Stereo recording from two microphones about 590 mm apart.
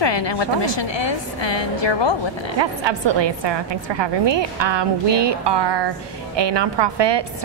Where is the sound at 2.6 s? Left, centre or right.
Right.